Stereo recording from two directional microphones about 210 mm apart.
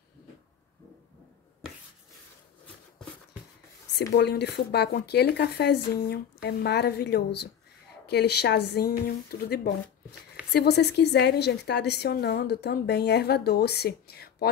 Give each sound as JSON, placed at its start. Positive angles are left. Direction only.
{"t": 4.1, "sound": "a woman's voice", "side_deg": 50}